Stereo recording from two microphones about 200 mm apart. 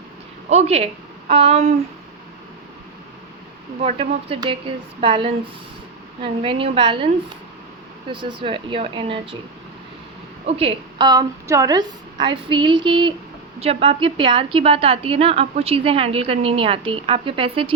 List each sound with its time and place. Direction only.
0.5 s speech: 30° right (ahead or behind)
1.3 s a sound: 30° right (ahead or behind)
3.8 s a woman's voice: 30° right (ahead or behind)
6.4 s a woman's voice: 25° right (ahead or behind)
8.1 s a woman's voice: 25° right (ahead or behind)
10.4 s a woman's voice: 30° right (ahead or behind)